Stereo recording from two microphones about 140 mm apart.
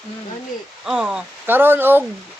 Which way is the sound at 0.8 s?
5° right (ahead or behind).